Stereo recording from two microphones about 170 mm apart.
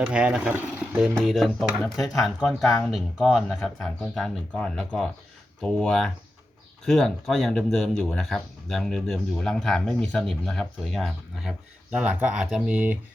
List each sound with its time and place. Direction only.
0.0 s speech: 5° right (ahead or behind)